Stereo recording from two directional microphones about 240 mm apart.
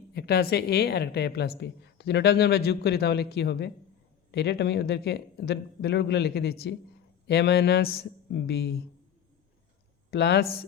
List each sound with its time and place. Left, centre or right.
0.1 s a woman's voice: left
10.1 s a man's voice: left